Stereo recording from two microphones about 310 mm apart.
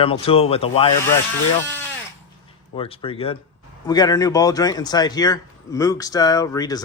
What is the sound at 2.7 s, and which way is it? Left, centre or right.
Speech, centre.